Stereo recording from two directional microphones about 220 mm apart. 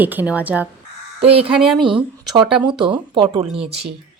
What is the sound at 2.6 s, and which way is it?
A woman's voice, 20° right (ahead or behind).